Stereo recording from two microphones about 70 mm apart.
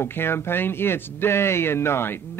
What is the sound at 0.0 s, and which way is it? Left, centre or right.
A man's voice, left.